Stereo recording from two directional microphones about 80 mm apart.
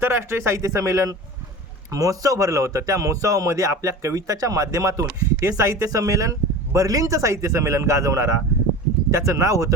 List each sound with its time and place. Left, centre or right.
0.0 s a man's voice: right